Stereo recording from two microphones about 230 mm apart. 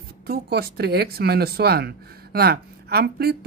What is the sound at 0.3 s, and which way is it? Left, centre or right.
Speech, right.